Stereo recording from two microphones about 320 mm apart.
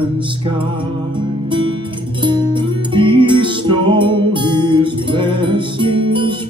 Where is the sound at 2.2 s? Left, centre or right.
Centre.